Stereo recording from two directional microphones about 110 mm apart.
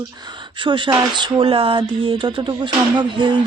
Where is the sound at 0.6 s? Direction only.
45° right (ahead or behind).